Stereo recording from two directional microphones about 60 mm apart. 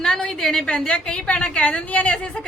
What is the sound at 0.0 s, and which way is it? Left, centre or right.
A woman's voice, centre.